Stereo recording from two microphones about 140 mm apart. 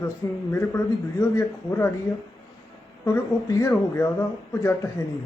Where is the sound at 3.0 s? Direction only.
20° left (ahead or behind).